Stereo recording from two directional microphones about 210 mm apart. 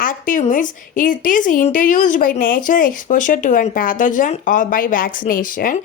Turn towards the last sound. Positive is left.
turn(degrees=40)  # may be behind; listen again after turning